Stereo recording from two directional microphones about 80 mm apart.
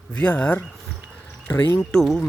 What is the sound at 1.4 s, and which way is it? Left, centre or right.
Speech, left.